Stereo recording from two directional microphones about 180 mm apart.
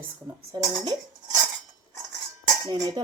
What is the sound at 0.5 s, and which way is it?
Speech, 25° right (ahead or behind).